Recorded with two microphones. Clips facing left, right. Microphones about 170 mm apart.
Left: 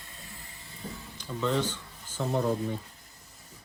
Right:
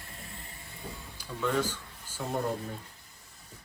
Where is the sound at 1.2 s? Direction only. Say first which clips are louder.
Left 1 dB; 5° right (ahead or behind).